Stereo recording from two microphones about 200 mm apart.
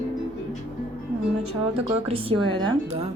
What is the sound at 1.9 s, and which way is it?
Speech, 30° right (ahead or behind).